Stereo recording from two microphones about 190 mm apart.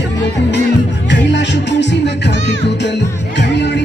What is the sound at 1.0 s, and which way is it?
Music, 65° left (ahead or behind).